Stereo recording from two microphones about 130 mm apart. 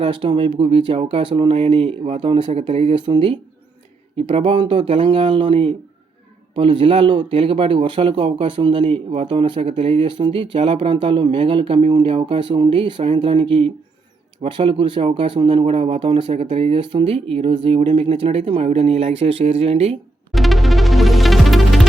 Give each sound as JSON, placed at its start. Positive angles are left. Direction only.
{"t": 0.0, "sound": "speech", "side_deg": -40}
{"t": 9.6, "sound": "speech", "side_deg": -60}
{"t": 10.0, "sound": "speech", "side_deg": -35}
{"t": 20.3, "sound": "music", "side_deg": 0}